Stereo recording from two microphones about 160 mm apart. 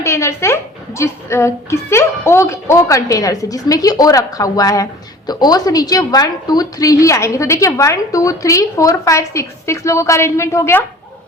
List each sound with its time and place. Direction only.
0.0 s a woman's voice: 20° left (ahead or behind)